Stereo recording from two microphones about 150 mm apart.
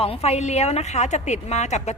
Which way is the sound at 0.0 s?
45° left (ahead or behind).